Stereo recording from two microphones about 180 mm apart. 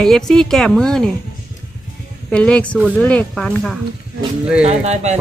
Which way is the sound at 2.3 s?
5° left (ahead or behind).